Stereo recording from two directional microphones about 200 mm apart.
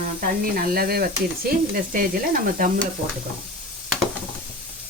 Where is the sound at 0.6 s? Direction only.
50° right (ahead or behind).